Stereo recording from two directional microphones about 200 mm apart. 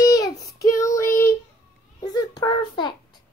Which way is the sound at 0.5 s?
15° left (ahead or behind).